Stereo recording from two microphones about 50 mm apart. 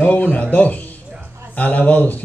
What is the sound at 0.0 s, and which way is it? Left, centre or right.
A man's voice, left.